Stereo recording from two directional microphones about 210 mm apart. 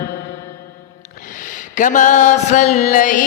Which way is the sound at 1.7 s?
40° left (ahead or behind).